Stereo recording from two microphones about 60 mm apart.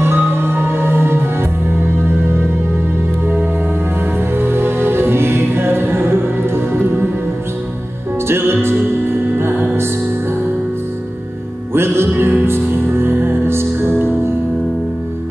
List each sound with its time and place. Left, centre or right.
0.0 s music: right
4.4 s music: right
8.3 s music: right
11.7 s music: right